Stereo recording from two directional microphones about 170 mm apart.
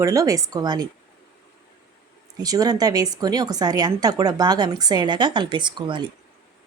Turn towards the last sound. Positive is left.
turn(degrees=-25)  # may be behind; listen again after turning